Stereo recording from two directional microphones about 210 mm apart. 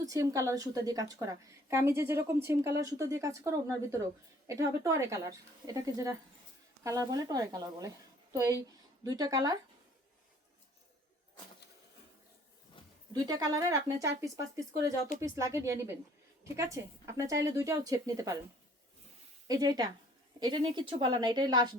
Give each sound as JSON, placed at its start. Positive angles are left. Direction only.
{"t": 0.0, "sound": "a woman's voice", "side_deg": -15}
{"t": 13.2, "sound": "a woman's voice", "side_deg": -20}
{"t": 19.5, "sound": "a woman's voice", "side_deg": -20}